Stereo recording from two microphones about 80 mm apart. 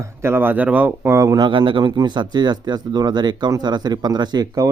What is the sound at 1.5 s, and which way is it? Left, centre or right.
Speech, right.